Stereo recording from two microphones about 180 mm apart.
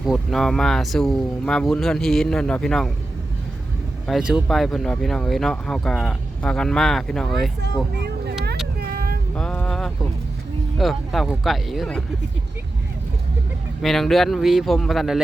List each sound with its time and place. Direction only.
0.0 s speech: centre (ahead or behind)
4.0 s speech: centre (ahead or behind)
7.9 s vehicle: 65° right (ahead or behind)
8.8 s a sound: 55° right (ahead or behind)
9.3 s music: 10° left (ahead or behind)
10.8 s speech: centre (ahead or behind)
13.8 s speech: centre (ahead or behind)